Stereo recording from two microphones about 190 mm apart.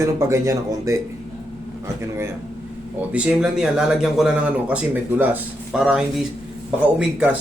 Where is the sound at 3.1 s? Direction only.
5° right (ahead or behind).